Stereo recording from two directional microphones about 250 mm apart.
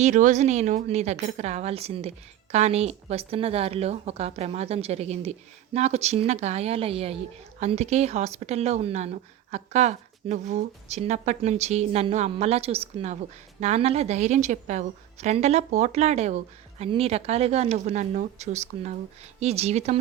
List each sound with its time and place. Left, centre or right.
0.0 s a woman's voice: right